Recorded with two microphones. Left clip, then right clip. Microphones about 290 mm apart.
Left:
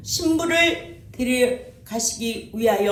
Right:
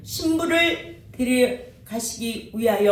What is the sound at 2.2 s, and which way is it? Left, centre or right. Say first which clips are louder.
Speech: even; left.